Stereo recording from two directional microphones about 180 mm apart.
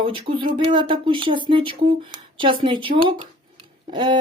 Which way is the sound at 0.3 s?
25° right (ahead or behind).